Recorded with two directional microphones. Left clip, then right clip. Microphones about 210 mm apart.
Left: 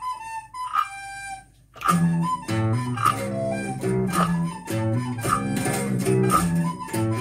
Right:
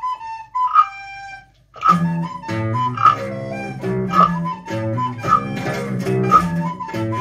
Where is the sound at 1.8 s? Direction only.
50° left (ahead or behind).